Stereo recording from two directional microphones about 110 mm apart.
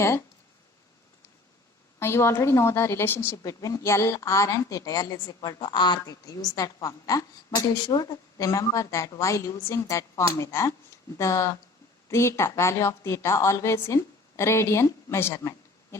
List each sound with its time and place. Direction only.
0.0 s speech: 25° left (ahead or behind)
2.0 s a woman's voice: 25° left (ahead or behind)